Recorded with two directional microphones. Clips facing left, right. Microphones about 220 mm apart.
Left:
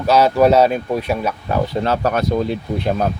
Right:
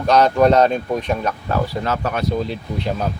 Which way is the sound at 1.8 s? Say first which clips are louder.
Left 4 dB; 30° left (ahead or behind).